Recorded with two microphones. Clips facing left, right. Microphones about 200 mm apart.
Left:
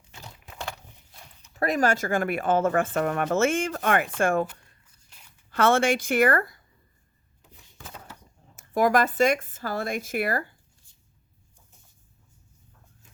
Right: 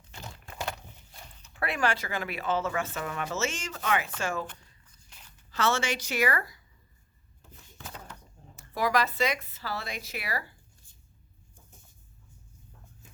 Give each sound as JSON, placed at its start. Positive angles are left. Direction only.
{"t": 0.1, "sound": "a sound", "side_deg": 0}
{"t": 1.5, "sound": "a woman's voice", "side_deg": 40}
{"t": 5.5, "sound": "a woman's voice", "side_deg": 55}
{"t": 8.5, "sound": "speech", "side_deg": 50}